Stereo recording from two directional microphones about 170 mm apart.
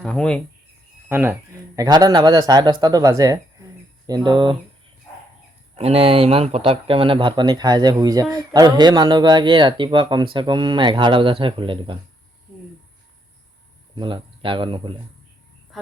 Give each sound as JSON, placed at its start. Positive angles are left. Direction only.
{"t": 0.0, "sound": "speech", "side_deg": 5}
{"t": 1.0, "sound": "speech", "side_deg": -10}
{"t": 5.7, "sound": "speech", "side_deg": -35}
{"t": 13.9, "sound": "speech", "side_deg": -30}
{"t": 15.7, "sound": "music", "side_deg": 0}